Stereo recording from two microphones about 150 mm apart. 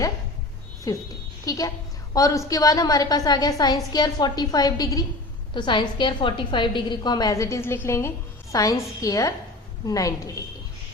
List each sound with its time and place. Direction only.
0.9 s a woman's voice: 25° left (ahead or behind)